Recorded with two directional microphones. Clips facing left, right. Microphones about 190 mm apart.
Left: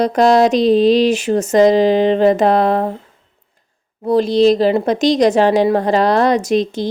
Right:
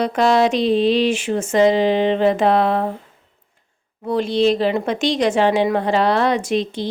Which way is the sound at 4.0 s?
35° left (ahead or behind).